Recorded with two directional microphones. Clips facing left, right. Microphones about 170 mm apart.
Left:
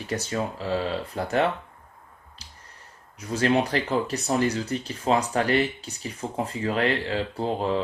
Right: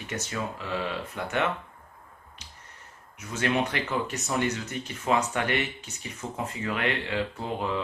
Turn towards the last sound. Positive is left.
turn(degrees=35)  # may be behind; listen again after turning